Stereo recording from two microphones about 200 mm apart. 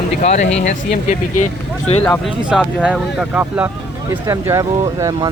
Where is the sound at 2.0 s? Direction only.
5° left (ahead or behind).